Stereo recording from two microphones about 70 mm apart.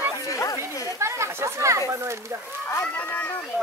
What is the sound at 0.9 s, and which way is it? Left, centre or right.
Speech, right.